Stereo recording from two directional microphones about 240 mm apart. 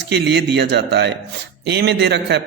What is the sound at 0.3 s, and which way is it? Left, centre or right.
A man's voice, right.